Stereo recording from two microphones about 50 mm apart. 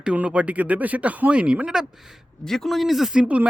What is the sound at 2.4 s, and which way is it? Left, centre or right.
Speech, centre.